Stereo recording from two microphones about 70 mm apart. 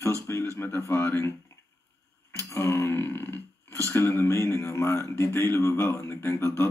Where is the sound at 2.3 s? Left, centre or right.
Left.